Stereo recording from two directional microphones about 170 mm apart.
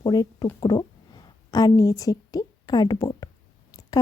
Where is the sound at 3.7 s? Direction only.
20° left (ahead or behind).